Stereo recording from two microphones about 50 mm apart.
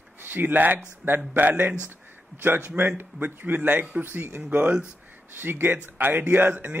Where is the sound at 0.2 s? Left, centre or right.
Right.